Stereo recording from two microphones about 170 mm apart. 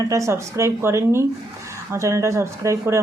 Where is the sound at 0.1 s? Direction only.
15° right (ahead or behind).